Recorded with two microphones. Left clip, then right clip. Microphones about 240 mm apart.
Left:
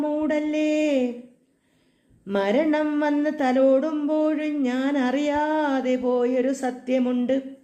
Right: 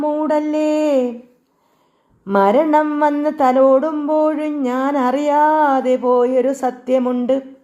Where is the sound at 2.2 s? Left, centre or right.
Right.